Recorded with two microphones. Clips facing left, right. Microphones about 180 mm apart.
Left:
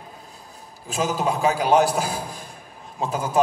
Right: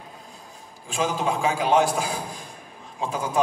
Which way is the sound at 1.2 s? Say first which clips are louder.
Left 4 dB; 40° left (ahead or behind).